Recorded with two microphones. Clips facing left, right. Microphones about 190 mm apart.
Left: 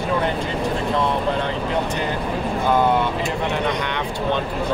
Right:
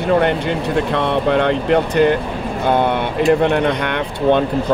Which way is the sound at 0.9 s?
70° right (ahead or behind).